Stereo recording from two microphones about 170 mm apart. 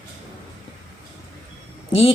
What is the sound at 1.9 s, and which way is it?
Speech, 30° left (ahead or behind).